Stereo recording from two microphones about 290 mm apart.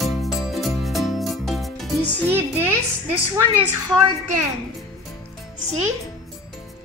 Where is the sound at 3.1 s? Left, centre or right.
Right.